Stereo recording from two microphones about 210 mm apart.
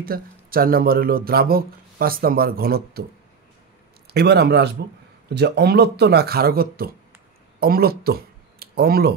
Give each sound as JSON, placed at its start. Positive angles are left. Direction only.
{"t": 0.0, "sound": "speech", "side_deg": -45}
{"t": 4.1, "sound": "speech", "side_deg": -50}